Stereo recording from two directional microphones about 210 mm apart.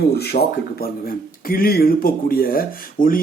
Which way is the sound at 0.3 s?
45° left (ahead or behind).